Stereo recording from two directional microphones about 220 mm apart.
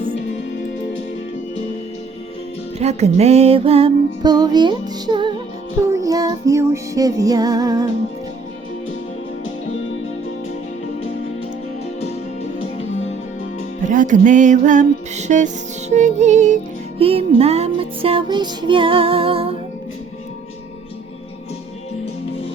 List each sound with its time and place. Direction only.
2.7 s music: 30° right (ahead or behind)
13.9 s music: 35° right (ahead or behind)